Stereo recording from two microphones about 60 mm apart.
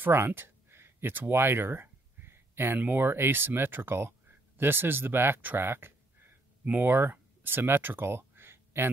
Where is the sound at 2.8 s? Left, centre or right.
Right.